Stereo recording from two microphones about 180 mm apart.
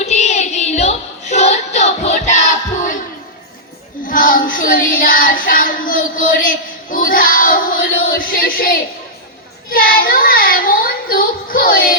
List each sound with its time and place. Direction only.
0.0 s child singing: 40° left (ahead or behind)
4.0 s child singing: 50° left (ahead or behind)